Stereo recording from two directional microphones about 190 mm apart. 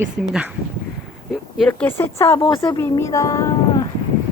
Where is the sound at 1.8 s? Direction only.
10° left (ahead or behind).